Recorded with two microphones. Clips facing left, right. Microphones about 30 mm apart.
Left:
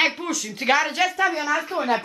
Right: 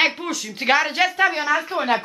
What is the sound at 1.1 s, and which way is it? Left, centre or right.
Speech, right.